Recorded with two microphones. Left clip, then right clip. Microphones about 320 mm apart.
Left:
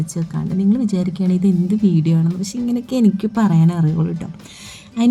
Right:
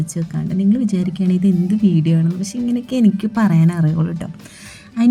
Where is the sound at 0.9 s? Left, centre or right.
Left.